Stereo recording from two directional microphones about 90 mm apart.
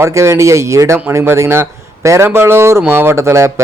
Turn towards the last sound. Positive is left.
turn(degrees=-30)  # may be behind; listen again after turning